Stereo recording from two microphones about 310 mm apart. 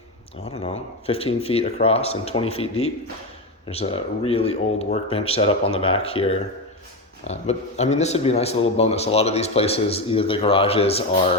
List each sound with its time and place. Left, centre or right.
0.4 s a man's voice: centre